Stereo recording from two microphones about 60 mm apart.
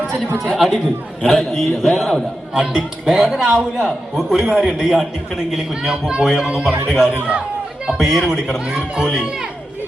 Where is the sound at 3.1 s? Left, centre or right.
Centre.